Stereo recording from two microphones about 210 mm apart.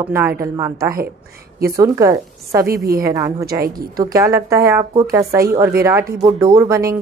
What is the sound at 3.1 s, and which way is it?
A woman's voice, 15° right (ahead or behind).